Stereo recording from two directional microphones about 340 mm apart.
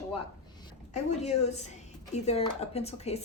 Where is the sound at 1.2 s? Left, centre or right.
Centre.